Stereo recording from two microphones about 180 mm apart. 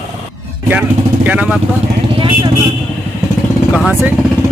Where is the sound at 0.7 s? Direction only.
10° right (ahead or behind).